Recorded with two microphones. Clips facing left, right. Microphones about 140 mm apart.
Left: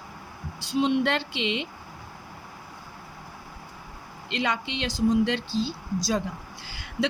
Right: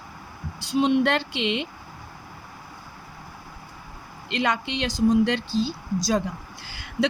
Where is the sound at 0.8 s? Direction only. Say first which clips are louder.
Right 3 dB; 55° right (ahead or behind).